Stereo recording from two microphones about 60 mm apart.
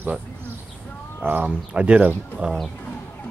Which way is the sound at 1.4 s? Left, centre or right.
Centre.